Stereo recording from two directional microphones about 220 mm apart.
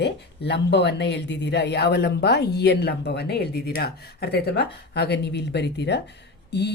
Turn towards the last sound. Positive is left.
turn(degrees=50)  # may be behind; listen again after turning